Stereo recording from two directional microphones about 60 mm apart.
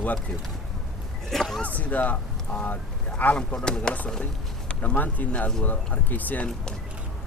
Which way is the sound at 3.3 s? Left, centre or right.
Centre.